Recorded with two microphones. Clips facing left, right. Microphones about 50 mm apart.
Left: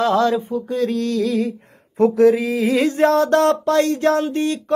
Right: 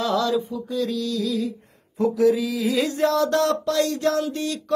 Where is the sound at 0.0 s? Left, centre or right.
Left.